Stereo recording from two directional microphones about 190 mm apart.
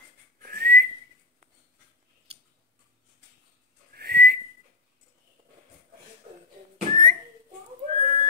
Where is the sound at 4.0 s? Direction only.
55° right (ahead or behind).